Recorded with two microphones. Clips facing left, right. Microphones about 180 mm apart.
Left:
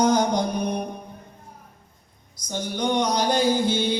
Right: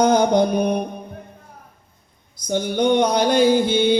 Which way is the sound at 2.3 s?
60° right (ahead or behind).